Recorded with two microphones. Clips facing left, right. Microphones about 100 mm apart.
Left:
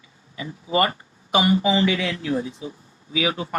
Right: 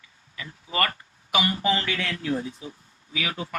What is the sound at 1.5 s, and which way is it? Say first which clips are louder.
Speech: left 6 dB; 15° left (ahead or behind).